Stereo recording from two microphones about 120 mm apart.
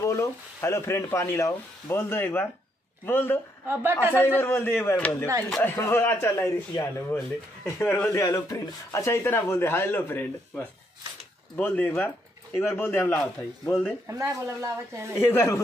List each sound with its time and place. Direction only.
0.0 s speech: 25° left (ahead or behind)
3.6 s a woman's voice: 20° right (ahead or behind)
4.4 s speech: 20° left (ahead or behind)
7.6 s speech: 20° left (ahead or behind)
13.2 s a man's voice: 5° left (ahead or behind)
14.0 s a woman's voice: 25° right (ahead or behind)
15.1 s speech: 20° left (ahead or behind)